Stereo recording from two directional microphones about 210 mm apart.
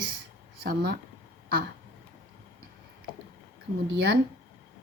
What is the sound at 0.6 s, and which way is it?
Speech, 50° right (ahead or behind).